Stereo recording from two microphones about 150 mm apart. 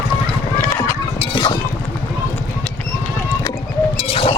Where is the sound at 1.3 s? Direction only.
30° left (ahead or behind).